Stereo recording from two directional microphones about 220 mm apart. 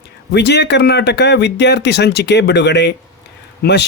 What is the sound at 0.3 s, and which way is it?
Speech, 50° left (ahead or behind).